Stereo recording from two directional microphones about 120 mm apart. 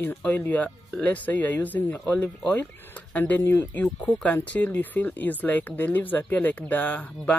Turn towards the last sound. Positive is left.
turn(degrees=15)  # may be behind; listen again after turning